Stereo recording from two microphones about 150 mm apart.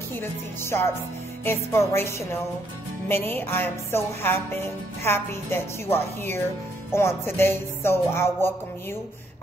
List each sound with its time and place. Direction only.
0.1 s speech: 15° left (ahead or behind)